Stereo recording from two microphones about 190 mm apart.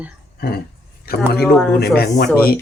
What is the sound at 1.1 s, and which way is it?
Speech, 55° left (ahead or behind).